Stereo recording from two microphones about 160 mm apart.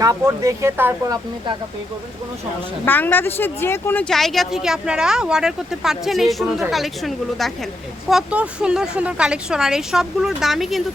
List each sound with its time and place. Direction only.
0.0 s speech: 20° right (ahead or behind)
2.8 s speech: 10° left (ahead or behind)
4.1 s speech: centre (ahead or behind)